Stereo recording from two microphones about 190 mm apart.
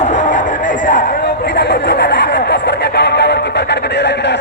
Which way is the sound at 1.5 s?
65° left (ahead or behind).